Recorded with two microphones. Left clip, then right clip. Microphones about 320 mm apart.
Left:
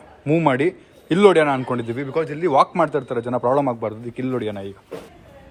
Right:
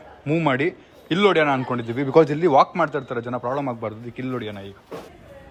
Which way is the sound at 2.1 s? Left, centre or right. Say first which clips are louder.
Right 6 dB; centre.